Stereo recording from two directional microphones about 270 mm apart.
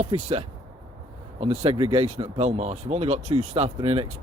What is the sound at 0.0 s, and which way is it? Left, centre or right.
Speech, right.